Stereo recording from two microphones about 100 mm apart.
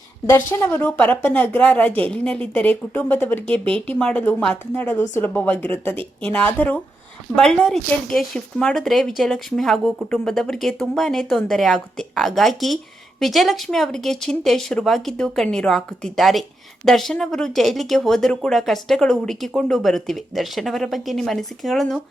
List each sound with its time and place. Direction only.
0.3 s a woman's voice: 20° left (ahead or behind); by 22.0 s centre (ahead or behind)